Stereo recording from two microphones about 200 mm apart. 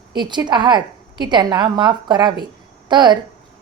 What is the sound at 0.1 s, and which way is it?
A woman's voice, 20° right (ahead or behind).